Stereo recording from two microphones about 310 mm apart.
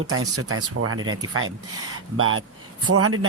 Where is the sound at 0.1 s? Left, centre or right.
Right.